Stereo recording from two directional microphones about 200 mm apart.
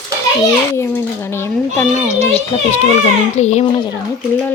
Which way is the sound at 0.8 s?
10° left (ahead or behind).